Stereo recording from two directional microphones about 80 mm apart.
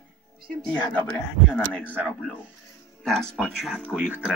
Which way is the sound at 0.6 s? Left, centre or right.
Centre.